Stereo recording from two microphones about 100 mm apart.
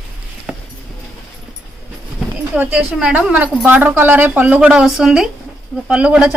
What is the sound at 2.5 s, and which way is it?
A woman's voice, 15° right (ahead or behind).